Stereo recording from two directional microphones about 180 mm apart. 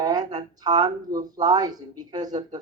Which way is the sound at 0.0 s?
20° right (ahead or behind).